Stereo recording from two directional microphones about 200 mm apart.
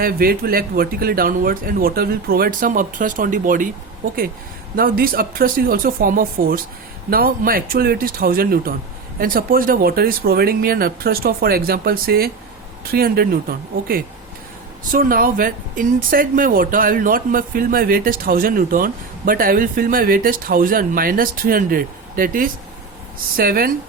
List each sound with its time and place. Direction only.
0.0 s speech: 45° right (ahead or behind)
4.8 s speech: 45° right (ahead or behind)